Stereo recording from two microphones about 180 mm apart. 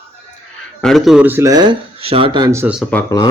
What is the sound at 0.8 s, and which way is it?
Speech, centre (ahead or behind).